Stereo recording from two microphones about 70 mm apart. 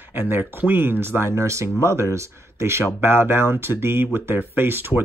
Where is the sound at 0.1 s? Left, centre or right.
Right.